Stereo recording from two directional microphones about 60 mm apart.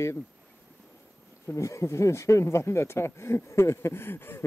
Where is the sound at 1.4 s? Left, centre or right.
Left.